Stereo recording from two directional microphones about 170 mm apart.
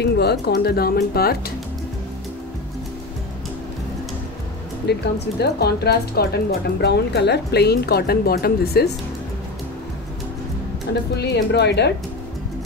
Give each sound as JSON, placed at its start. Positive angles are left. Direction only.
{"t": 0.0, "sound": "speech", "side_deg": 70}
{"t": 4.8, "sound": "speech", "side_deg": 80}
{"t": 10.9, "sound": "a woman's voice", "side_deg": 80}